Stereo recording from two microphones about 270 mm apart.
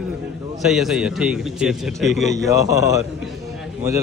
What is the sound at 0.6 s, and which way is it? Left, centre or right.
A man's voice, centre.